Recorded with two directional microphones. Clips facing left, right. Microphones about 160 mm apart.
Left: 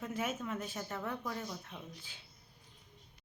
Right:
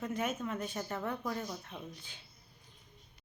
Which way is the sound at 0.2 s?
5° left (ahead or behind).